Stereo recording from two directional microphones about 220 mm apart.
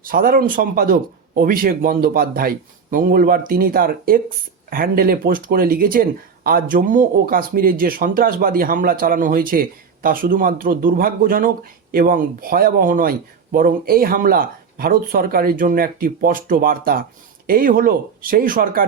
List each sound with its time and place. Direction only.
0.0 s speech: 40° right (ahead or behind)